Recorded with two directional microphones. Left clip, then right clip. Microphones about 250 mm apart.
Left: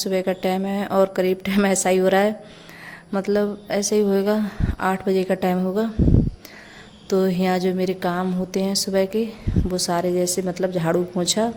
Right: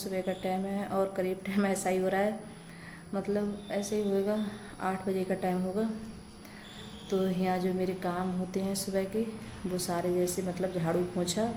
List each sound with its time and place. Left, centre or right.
0.0 s speech: left
7.1 s speech: left